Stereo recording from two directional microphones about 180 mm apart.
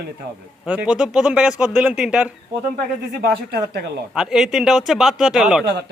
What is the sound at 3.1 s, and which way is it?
Speech, 60° right (ahead or behind).